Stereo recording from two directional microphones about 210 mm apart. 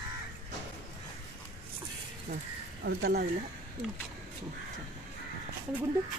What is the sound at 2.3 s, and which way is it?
Speech, 50° right (ahead or behind).